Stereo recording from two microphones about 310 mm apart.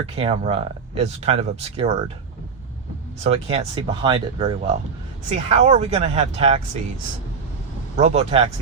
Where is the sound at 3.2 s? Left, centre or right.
Centre.